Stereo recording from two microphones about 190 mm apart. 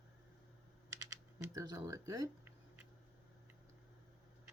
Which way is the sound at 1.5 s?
15° right (ahead or behind).